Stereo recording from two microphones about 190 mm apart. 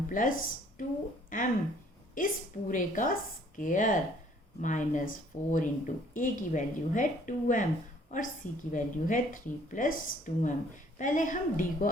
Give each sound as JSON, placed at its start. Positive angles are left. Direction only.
{"t": 0.1, "sound": "a woman's voice", "side_deg": 45}